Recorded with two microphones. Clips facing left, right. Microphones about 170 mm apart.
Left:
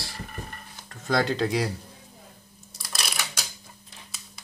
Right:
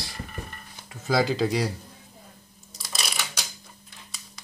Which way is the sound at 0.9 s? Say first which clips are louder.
Right 1 dB; 5° right (ahead or behind).